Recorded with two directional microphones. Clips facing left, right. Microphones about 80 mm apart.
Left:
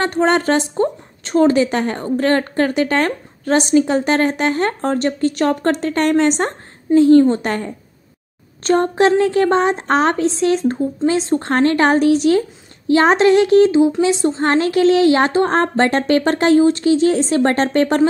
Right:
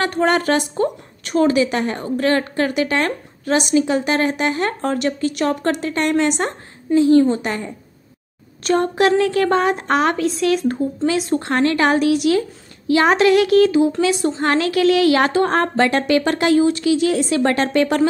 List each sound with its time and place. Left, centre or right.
0.0 s a woman's voice: left
8.6 s a woman's voice: left